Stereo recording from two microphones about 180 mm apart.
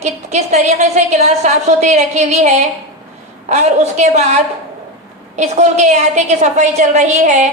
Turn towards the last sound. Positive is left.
turn(degrees=-40)  # may be behind; listen again after turning